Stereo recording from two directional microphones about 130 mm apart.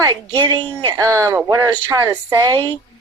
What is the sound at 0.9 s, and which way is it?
Speech, 20° right (ahead or behind).